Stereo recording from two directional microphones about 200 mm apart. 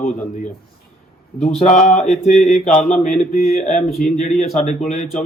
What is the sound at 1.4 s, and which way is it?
A man's voice, 30° left (ahead or behind).